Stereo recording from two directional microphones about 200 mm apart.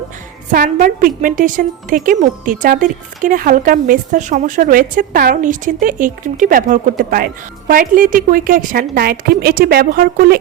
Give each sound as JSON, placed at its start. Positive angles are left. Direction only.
{"t": 0.5, "sound": "a woman's voice", "side_deg": -45}